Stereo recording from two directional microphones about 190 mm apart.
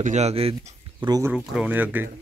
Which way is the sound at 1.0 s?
20° right (ahead or behind).